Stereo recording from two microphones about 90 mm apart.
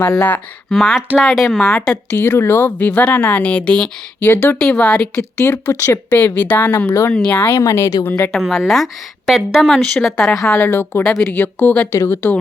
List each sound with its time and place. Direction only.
0.2 s speech: 20° left (ahead or behind)
0.7 s a woman's voice: 5° left (ahead or behind)
2.0 s speech: 30° left (ahead or behind); by 5.2 s 10° left (ahead or behind)
5.4 s speech: 30° left (ahead or behind)
6.1 s speech: 20° left (ahead or behind)
7.1 s speech: 15° left (ahead or behind)
7.5 s speech: 35° left (ahead or behind)
8.0 s speech: 25° left (ahead or behind)
8.3 s a woman's voice: centre (ahead or behind)
10.5 s speech: 20° left (ahead or behind)
11.9 s speech: 30° left (ahead or behind)